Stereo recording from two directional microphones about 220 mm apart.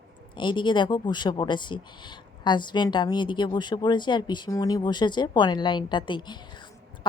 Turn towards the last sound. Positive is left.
turn(degrees=20)  # may be behind; listen again after turning